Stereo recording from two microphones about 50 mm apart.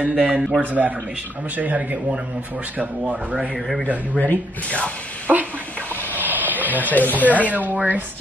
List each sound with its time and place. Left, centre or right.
0.0 s speech: right
0.6 s a man's voice: right
3.5 s a man's voice: centre
4.1 s speech: left
5.3 s speech: right
6.1 s a sound: right
7.1 s a man's voice: right